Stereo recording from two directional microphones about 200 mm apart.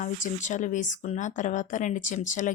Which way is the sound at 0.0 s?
40° left (ahead or behind).